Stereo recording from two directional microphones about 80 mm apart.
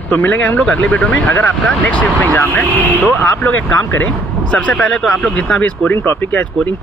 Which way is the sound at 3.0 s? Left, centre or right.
Left.